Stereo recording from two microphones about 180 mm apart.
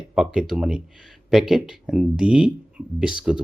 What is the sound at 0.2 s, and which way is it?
Speech, 5° right (ahead or behind).